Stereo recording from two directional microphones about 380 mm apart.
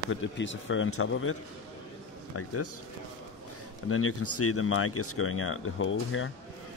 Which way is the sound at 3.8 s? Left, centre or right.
Left.